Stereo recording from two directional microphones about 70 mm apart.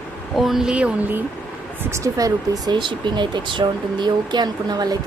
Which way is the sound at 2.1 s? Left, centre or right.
Right.